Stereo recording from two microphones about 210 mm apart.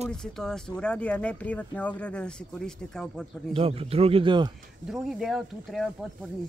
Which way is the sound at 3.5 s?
25° right (ahead or behind).